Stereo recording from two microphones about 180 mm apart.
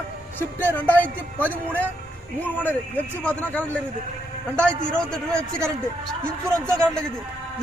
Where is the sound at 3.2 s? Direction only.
10° left (ahead or behind).